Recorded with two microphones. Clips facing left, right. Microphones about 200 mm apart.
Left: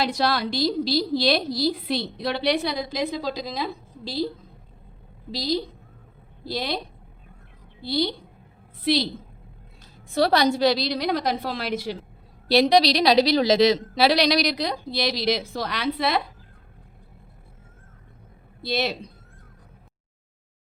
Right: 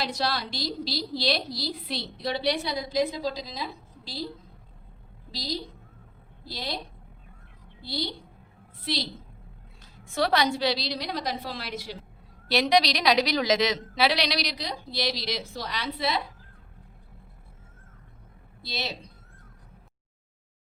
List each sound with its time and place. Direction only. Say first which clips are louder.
0.0 s a woman's voice: left 6 dB; 55° left (ahead or behind); by 4.2 s 75° left (ahead or behind)
5.3 s a woman's voice: left 8 dB; 75° left (ahead or behind)
7.9 s a woman's voice: left 8 dB; 75° left (ahead or behind)
10.0 s a woman's voice: left 5 dB; 35° left (ahead or behind); by 11.9 s 65° left (ahead or behind)
12.5 s a woman's voice: left 5 dB; 35° left (ahead or behind); by 16.2 s 60° left (ahead or behind)
18.6 s a woman's voice: left 9 dB; 60° left (ahead or behind)